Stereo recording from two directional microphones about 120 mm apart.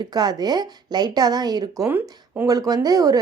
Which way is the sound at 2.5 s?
30° right (ahead or behind).